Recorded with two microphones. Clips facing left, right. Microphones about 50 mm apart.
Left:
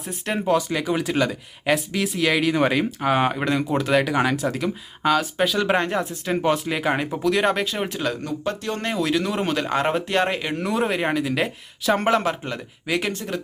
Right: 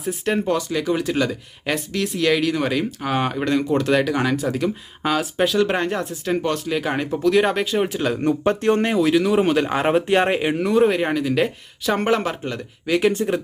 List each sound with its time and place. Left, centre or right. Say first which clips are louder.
0.0 s speech: right 4 dB; centre
8.2 s speech: right 8 dB; right
8.8 s speech: right 5 dB; centre
10.5 s speech: right 6 dB; centre